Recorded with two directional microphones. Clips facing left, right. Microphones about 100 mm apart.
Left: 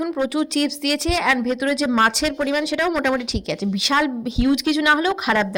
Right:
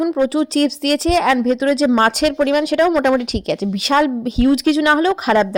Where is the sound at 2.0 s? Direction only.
50° right (ahead or behind); by 5.5 s 30° right (ahead or behind).